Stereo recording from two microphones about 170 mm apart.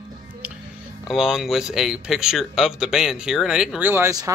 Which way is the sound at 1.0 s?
Centre (ahead or behind).